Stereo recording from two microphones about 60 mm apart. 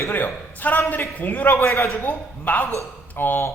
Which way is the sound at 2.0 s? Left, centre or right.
Left.